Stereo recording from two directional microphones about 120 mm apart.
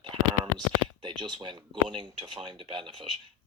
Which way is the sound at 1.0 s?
40° right (ahead or behind).